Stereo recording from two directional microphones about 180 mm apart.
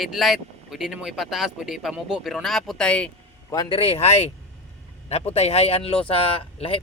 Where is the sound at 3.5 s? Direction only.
30° left (ahead or behind).